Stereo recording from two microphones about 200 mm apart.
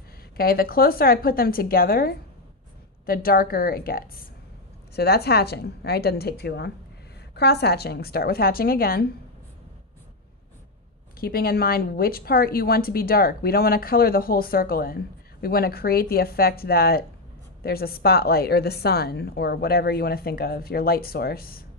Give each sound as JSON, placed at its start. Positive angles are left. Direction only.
{"t": 0.4, "sound": "a woman's voice", "side_deg": 50}
{"t": 11.1, "sound": "a woman's voice", "side_deg": 50}